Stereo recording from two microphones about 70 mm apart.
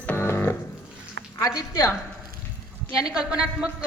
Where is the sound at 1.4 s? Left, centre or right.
Left.